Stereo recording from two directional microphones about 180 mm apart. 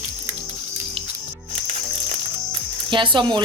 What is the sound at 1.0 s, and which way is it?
Music, 30° right (ahead or behind).